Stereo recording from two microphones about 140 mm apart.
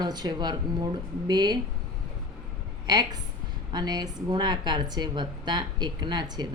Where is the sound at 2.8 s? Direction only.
30° right (ahead or behind).